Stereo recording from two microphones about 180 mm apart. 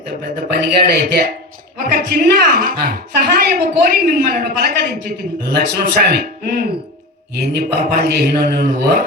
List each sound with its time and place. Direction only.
0.5 s a woman's voice: 60° right (ahead or behind)